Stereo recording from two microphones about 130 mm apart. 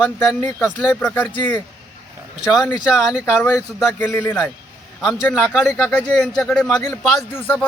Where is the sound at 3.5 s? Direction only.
25° left (ahead or behind).